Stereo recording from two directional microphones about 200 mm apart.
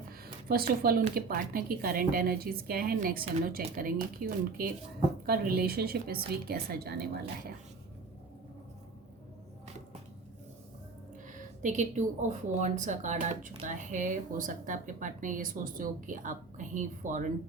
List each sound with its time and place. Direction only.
0.4 s a woman's voice: 50° right (ahead or behind)
11.3 s speech: 40° right (ahead or behind)